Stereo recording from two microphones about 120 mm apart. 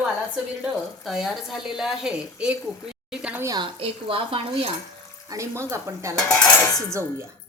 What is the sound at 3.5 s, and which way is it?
Speech, 45° right (ahead or behind).